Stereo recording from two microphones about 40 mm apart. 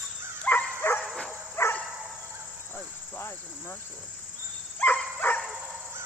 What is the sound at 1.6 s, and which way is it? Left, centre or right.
Dog, left.